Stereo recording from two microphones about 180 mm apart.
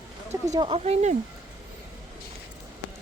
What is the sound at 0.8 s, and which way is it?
Speech, 40° right (ahead or behind).